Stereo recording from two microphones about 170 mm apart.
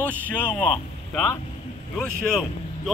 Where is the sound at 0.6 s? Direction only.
5° left (ahead or behind).